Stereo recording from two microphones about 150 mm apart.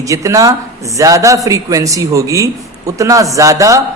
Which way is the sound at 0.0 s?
20° right (ahead or behind).